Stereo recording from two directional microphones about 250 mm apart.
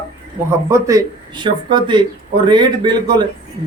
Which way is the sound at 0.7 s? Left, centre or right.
Centre.